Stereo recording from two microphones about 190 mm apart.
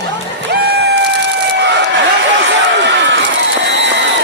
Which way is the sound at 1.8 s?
70° right (ahead or behind).